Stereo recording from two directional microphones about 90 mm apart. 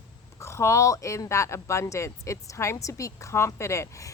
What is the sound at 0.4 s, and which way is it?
Speech, 30° left (ahead or behind).